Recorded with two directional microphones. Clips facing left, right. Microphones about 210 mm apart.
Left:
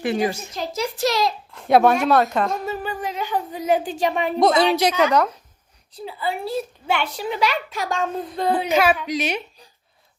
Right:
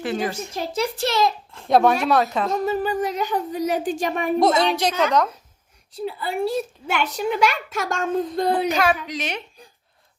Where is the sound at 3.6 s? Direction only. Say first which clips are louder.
Left 4 dB; 45° right (ahead or behind).